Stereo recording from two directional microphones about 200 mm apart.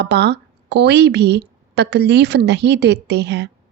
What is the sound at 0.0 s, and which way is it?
A woman's voice, 60° right (ahead or behind).